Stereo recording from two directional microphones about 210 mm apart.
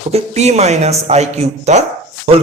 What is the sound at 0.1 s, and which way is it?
Speech, 30° right (ahead or behind).